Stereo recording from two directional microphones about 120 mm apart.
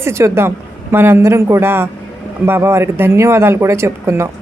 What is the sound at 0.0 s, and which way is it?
A woman's voice, 25° right (ahead or behind).